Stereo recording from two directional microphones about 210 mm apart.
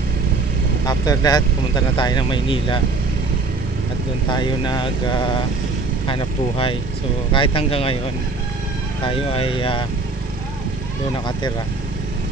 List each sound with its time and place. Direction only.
0.8 s speech: 20° left (ahead or behind)
4.3 s speech: 20° left (ahead or behind)
9.0 s speech: 25° left (ahead or behind)